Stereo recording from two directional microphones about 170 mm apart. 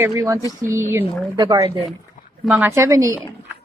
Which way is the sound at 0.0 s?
20° right (ahead or behind).